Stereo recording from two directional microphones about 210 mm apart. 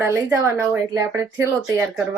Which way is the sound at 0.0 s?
10° right (ahead or behind).